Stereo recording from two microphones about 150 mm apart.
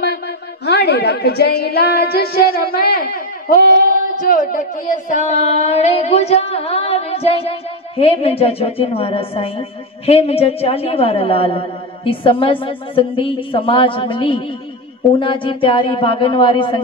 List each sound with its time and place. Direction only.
0.7 s a woman's voice: 90° left; by 16.8 s 35° left (ahead or behind)